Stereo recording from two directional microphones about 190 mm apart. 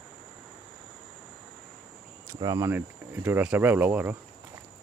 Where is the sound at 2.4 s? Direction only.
20° right (ahead or behind).